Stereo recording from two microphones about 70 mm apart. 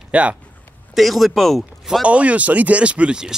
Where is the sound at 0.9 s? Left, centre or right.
Centre.